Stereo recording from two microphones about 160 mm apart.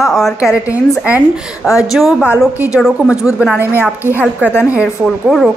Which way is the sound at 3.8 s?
15° left (ahead or behind).